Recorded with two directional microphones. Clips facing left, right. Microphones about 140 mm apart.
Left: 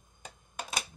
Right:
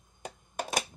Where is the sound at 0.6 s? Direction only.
45° right (ahead or behind).